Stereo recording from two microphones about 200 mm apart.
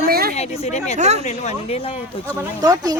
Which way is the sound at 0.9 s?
35° right (ahead or behind).